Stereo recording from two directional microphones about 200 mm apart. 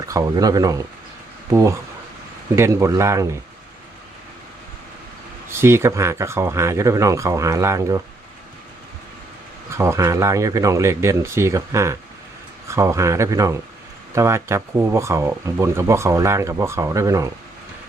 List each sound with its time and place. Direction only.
0.0 s speech: 15° right (ahead or behind)
2.6 s speech: 15° right (ahead or behind)
5.5 s speech: 10° right (ahead or behind)
9.6 s speech: 15° right (ahead or behind)